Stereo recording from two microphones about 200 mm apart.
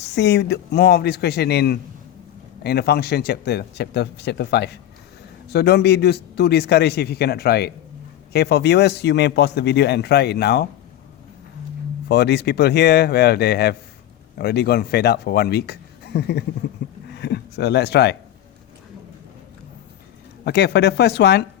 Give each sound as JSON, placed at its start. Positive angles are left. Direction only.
{"t": 0.1, "sound": "a man's voice", "side_deg": 60}
{"t": 12.0, "sound": "a man's voice", "side_deg": 55}
{"t": 17.1, "sound": "a sound", "side_deg": 55}
{"t": 20.4, "sound": "a man's voice", "side_deg": 55}